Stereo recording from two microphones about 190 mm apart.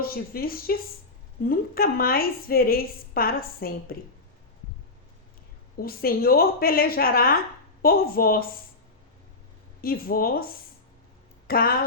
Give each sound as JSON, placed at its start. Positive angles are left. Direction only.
{"t": 0.0, "sound": "a woman's voice", "side_deg": 50}
{"t": 5.7, "sound": "a woman's voice", "side_deg": 50}
{"t": 9.8, "sound": "a woman's voice", "side_deg": 50}